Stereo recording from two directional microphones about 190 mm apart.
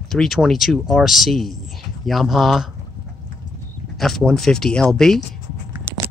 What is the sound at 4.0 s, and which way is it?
Speech, centre (ahead or behind).